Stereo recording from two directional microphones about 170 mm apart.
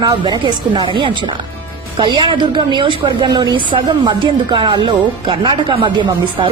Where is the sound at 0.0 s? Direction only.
25° right (ahead or behind).